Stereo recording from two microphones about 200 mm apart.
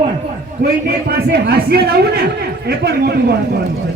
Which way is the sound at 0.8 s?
50° right (ahead or behind).